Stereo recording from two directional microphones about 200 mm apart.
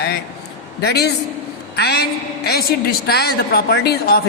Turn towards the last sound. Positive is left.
turn(degrees=50)  # may be behind; listen again after turning